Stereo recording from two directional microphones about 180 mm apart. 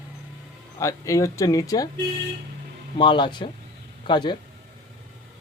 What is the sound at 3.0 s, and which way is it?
Speech, 25° left (ahead or behind).